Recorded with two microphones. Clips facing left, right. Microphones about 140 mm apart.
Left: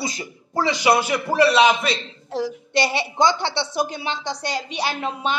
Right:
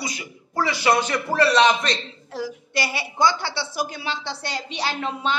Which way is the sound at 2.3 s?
25° left (ahead or behind).